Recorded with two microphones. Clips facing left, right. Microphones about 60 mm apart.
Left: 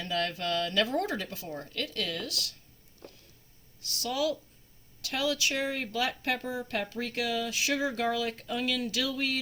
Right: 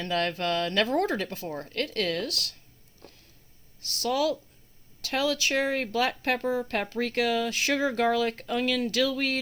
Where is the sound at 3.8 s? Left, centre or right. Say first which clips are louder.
Right 4 dB; right.